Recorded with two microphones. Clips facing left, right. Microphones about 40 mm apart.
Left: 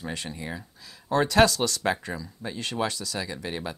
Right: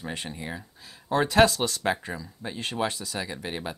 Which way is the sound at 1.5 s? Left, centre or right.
Right.